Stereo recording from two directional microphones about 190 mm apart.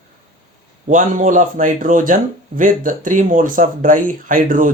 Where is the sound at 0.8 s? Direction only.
40° right (ahead or behind).